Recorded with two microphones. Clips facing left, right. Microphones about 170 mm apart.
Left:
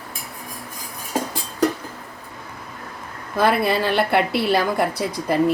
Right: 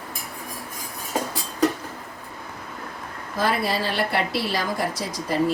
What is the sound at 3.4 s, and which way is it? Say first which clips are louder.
A woman's voice: left 5 dB; 60° left (ahead or behind).